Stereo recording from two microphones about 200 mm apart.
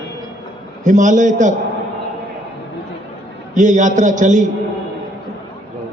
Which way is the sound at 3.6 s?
40° right (ahead or behind).